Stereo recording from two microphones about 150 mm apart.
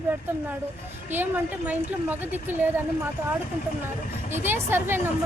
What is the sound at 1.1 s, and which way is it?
Speech, 10° right (ahead or behind).